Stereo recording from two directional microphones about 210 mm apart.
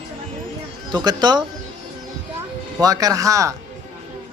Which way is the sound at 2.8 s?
15° right (ahead or behind).